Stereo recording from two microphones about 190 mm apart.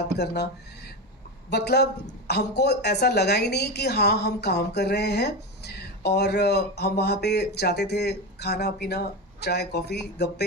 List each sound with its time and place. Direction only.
0.2 s speech: 60° left (ahead or behind)
1.5 s speech: 60° left (ahead or behind)